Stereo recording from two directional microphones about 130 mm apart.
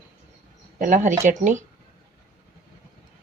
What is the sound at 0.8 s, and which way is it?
Speech, 80° right.